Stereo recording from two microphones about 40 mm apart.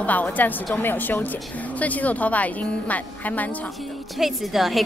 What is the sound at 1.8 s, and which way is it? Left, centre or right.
A woman's voice, left.